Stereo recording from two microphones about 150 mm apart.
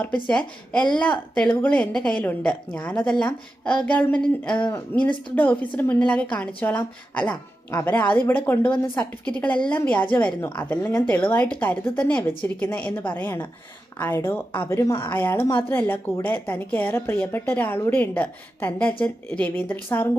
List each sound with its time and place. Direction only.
0.3 s speech: 5° left (ahead or behind)
4.5 s speech: 30° left (ahead or behind)
5.3 s speech: 10° left (ahead or behind)